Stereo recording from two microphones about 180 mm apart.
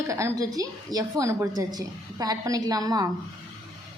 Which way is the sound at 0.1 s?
15° right (ahead or behind).